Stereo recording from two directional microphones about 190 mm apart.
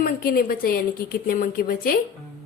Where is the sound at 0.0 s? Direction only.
50° left (ahead or behind).